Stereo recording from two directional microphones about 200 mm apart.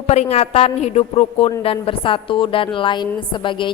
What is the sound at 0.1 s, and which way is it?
A woman's voice, 30° left (ahead or behind).